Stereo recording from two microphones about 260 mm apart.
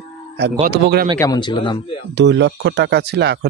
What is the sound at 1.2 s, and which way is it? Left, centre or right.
Speech, centre.